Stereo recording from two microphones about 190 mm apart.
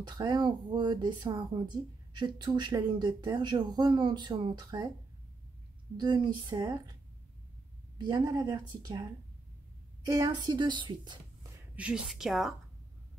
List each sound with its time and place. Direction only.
0.0 s speech: 25° right (ahead or behind)
5.9 s speech: 25° right (ahead or behind)
8.0 s speech: 20° right (ahead or behind)
10.0 s speech: 20° right (ahead or behind)
11.7 s a woman's voice: 5° right (ahead or behind)